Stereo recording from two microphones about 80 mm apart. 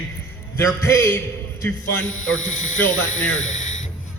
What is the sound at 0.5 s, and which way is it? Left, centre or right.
Speech, left.